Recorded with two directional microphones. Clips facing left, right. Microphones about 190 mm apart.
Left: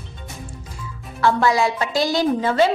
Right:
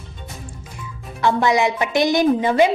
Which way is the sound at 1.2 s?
20° right (ahead or behind).